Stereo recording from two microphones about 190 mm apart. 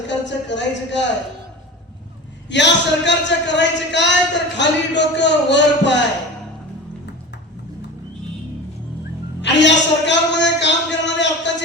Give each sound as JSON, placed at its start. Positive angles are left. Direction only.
{"t": 0.1, "sound": "a man's voice", "side_deg": 70}
{"t": 2.5, "sound": "a man's voice", "side_deg": 70}
{"t": 9.4, "sound": "a sound", "side_deg": 70}